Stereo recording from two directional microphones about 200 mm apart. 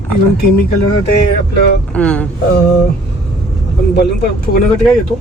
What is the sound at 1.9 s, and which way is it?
Speech, 5° left (ahead or behind).